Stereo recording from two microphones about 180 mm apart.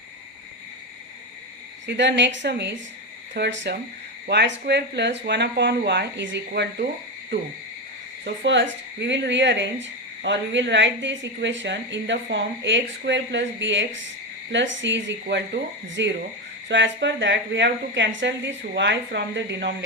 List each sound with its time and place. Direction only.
1.9 s a woman's voice: 80° right
8.2 s a woman's voice: 90° right